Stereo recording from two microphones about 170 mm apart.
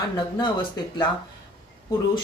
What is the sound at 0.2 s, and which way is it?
Speech, 25° left (ahead or behind).